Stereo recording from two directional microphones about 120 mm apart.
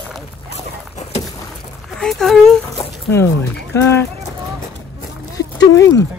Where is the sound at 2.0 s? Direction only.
5° left (ahead or behind).